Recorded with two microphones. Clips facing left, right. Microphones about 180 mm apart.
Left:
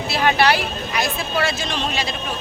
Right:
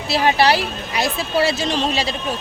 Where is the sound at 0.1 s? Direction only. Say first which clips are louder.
Right 2 dB; 35° right (ahead or behind).